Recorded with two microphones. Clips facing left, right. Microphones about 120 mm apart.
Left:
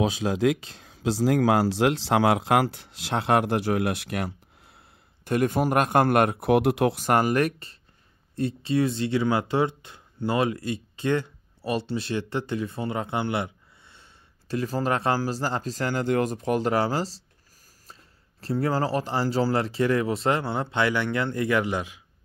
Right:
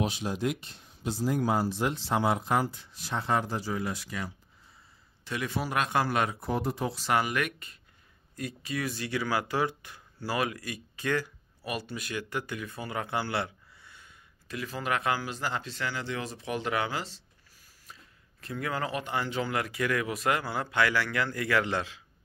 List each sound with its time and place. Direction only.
0.3 s speech: 90° left; by 17.2 s 35° left (ahead or behind)
18.4 s speech: 35° left (ahead or behind); by 22.0 s 15° left (ahead or behind)